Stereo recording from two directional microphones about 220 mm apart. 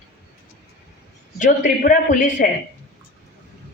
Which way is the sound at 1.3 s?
35° left (ahead or behind).